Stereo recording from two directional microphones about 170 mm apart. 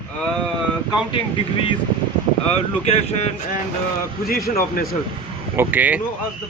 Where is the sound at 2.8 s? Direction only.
40° left (ahead or behind).